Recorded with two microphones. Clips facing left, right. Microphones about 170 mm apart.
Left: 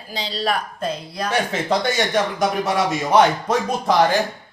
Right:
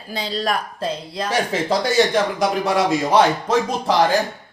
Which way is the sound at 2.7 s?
30° right (ahead or behind).